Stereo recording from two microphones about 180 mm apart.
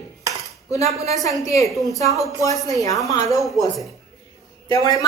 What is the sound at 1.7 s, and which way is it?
Speech, centre (ahead or behind).